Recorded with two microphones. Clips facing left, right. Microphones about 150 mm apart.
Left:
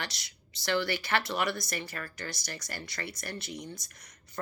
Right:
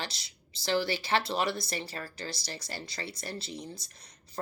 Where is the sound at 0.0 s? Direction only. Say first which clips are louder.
Right 1 dB; 25° right (ahead or behind).